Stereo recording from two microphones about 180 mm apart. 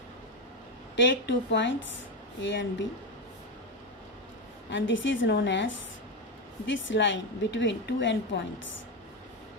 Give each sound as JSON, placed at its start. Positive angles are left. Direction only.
{"t": 0.9, "sound": "a woman's voice", "side_deg": 90}
{"t": 4.7, "sound": "a woman's voice", "side_deg": 90}